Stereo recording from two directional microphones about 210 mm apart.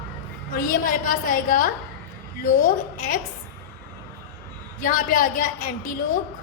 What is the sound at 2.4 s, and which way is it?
Speech, 35° left (ahead or behind).